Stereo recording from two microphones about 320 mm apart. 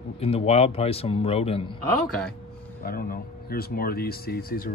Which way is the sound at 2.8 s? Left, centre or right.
Left.